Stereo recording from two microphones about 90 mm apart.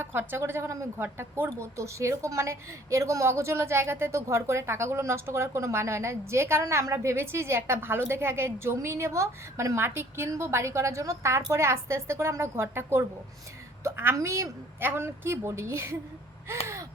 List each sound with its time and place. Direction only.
0.0 s a woman's voice: 25° right (ahead or behind)